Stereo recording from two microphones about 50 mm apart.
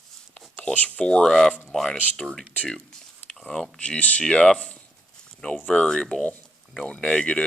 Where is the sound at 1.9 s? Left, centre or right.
Left.